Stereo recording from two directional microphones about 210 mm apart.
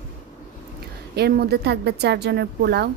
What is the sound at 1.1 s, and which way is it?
A woman's voice, 50° right (ahead or behind).